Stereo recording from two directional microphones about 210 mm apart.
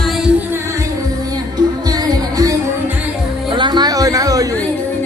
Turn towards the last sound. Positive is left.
turn(degrees=-15)  # may be behind; listen again after turning